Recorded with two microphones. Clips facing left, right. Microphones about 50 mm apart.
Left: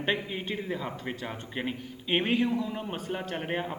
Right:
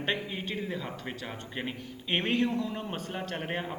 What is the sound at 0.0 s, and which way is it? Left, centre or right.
A man's voice, centre.